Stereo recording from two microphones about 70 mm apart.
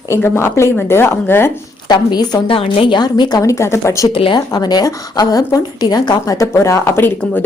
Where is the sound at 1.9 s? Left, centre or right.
Left.